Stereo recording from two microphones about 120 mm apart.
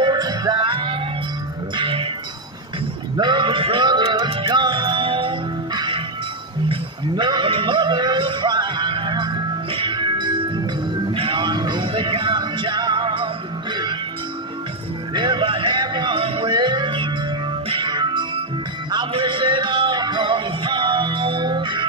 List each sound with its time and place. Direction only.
0.0 s music: 35° right (ahead or behind)
3.2 s music: 40° right (ahead or behind)
6.7 s a sound: 40° right (ahead or behind)
11.1 s music: 45° right (ahead or behind)
15.1 s music: 40° right (ahead or behind)